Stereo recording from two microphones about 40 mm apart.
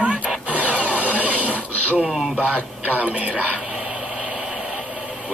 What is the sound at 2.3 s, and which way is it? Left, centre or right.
Speech, right.